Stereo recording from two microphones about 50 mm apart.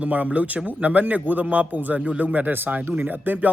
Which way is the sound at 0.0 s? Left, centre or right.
Right.